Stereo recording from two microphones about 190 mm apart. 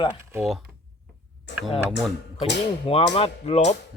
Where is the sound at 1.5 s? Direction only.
70° left (ahead or behind).